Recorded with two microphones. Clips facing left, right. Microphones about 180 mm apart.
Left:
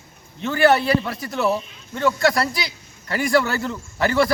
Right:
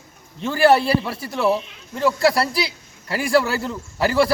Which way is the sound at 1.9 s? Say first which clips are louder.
Right 1 dB; centre (ahead or behind).